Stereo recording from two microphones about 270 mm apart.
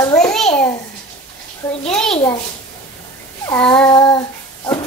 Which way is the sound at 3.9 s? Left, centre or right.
Centre.